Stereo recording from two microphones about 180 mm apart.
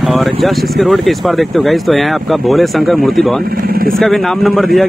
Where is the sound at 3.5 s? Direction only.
55° right (ahead or behind).